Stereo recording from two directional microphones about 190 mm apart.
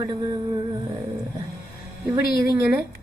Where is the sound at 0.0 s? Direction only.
20° right (ahead or behind).